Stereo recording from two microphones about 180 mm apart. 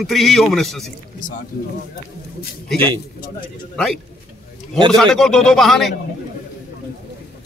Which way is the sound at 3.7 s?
Centre (ahead or behind).